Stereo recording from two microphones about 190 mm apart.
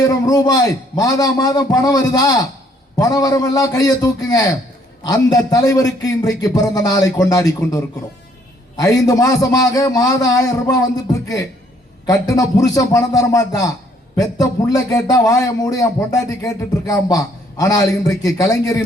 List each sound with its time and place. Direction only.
0.0 s a man's voice: 20° left (ahead or behind)